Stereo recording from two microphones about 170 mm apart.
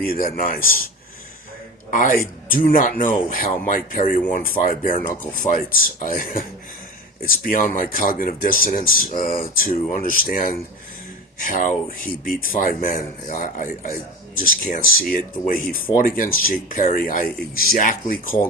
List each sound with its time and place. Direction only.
0.0 s speech: 55° left (ahead or behind)
1.9 s speech: 50° left (ahead or behind)
7.4 s speech: 55° left (ahead or behind)